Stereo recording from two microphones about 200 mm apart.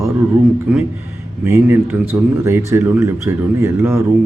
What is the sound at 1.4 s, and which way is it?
Speech, 10° right (ahead or behind).